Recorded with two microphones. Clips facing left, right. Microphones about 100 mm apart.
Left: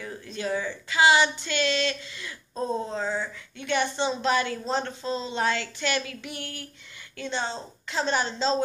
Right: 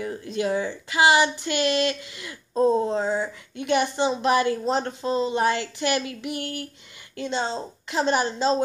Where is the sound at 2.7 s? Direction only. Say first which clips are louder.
Right 6 dB; 20° right (ahead or behind).